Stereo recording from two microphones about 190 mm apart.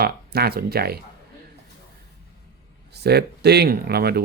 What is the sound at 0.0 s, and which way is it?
Speech, 55° right (ahead or behind).